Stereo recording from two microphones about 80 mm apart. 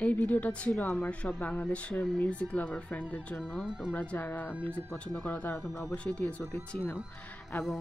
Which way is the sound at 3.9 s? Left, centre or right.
Centre.